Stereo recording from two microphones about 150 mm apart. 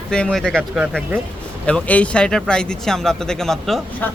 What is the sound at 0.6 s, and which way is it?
Speech, 10° right (ahead or behind).